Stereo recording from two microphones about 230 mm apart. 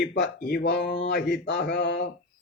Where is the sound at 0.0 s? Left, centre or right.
Left.